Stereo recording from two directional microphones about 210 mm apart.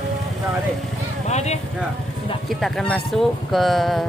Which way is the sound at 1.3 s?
30° left (ahead or behind).